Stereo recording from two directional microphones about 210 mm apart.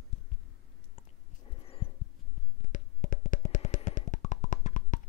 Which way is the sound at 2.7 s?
40° left (ahead or behind).